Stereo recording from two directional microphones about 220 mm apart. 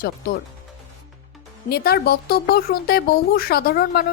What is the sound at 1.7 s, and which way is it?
Speech, 45° left (ahead or behind).